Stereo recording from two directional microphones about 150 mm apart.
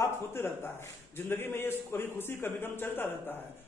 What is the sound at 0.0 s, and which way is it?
A man's voice, 15° left (ahead or behind).